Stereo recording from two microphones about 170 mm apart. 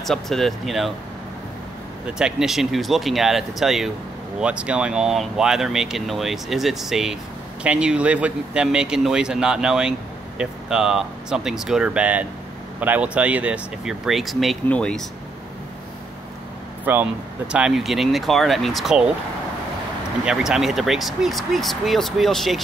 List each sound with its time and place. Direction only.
0.0 s speech: centre (ahead or behind)
2.0 s speech: 5° right (ahead or behind)
16.8 s speech: 10° right (ahead or behind)
20.2 s speech: centre (ahead or behind)